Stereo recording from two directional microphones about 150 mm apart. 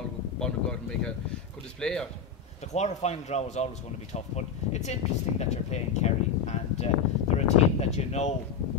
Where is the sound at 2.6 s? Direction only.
50° left (ahead or behind).